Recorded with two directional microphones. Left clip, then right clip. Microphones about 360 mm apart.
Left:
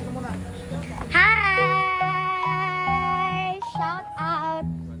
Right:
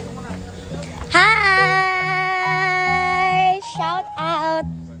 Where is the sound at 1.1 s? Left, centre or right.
Centre.